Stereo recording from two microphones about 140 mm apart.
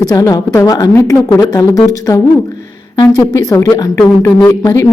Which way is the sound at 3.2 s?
25° left (ahead or behind).